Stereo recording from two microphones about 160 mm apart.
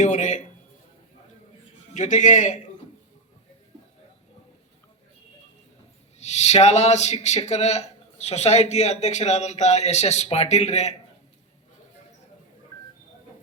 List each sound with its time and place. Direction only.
0.0 s a man's voice: 50° left (ahead or behind)
1.9 s speech: 50° left (ahead or behind)
6.1 s speech: 45° left (ahead or behind)